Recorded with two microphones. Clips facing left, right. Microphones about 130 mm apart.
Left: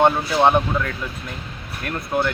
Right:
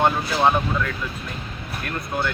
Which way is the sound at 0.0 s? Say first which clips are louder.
Left 3 dB; 25° left (ahead or behind).